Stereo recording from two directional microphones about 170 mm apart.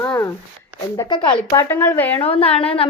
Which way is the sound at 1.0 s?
30° left (ahead or behind).